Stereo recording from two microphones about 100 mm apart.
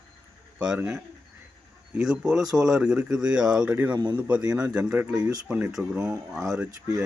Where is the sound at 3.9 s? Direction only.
45° right (ahead or behind).